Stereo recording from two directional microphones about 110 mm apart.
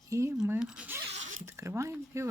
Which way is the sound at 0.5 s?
10° right (ahead or behind).